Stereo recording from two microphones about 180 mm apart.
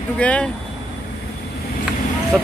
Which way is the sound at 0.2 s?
5° left (ahead or behind).